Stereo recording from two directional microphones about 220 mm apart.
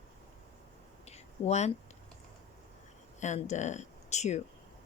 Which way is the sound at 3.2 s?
30° left (ahead or behind).